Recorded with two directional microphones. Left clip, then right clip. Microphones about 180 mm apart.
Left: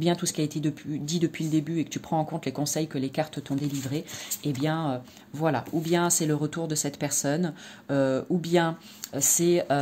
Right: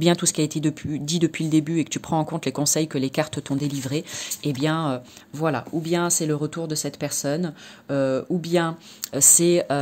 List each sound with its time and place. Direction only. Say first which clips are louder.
0.0 s speech: right 6 dB; 30° right (ahead or behind); by 8.7 s 15° right (ahead or behind)
9.1 s speech: right 5 dB; 30° right (ahead or behind)